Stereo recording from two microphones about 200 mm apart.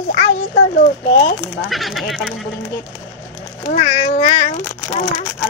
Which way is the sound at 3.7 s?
35° left (ahead or behind).